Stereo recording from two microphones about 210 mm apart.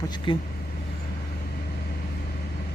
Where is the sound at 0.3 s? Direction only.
25° left (ahead or behind).